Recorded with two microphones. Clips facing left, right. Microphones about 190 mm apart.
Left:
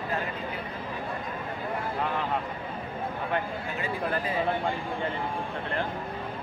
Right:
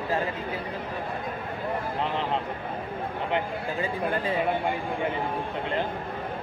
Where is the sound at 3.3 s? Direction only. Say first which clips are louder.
Right 4 dB; 25° right (ahead or behind).